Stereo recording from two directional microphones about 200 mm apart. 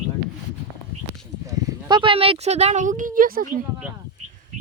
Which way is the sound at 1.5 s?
20° right (ahead or behind).